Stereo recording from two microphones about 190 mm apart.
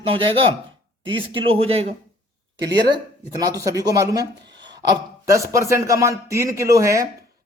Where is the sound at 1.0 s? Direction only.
25° right (ahead or behind).